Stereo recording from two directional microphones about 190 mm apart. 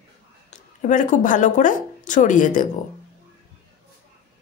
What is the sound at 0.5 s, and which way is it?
Speech, 40° left (ahead or behind).